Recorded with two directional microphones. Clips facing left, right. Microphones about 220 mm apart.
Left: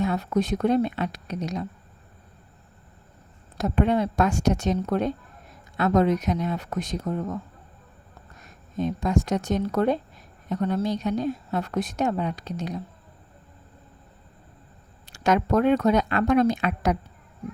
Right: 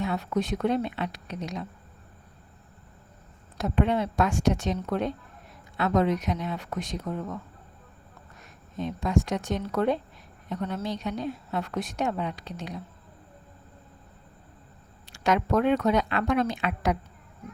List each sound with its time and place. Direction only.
0.0 s a woman's voice: 40° left (ahead or behind)
3.6 s speech: 40° left (ahead or behind)
8.8 s a woman's voice: 40° left (ahead or behind)
15.0 s speech: 45° left (ahead or behind)